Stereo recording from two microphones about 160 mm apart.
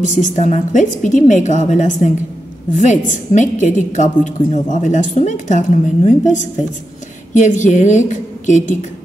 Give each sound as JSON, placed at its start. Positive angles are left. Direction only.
{"t": 0.0, "sound": "a woman's voice", "side_deg": 50}